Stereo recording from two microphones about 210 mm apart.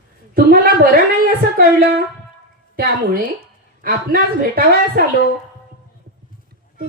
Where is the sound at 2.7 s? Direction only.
45° right (ahead or behind).